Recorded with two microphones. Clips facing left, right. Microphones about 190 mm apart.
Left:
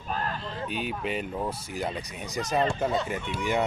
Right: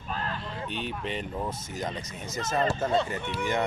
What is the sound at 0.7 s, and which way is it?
Speech, 10° left (ahead or behind).